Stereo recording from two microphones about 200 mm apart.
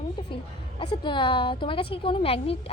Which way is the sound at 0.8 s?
20° left (ahead or behind).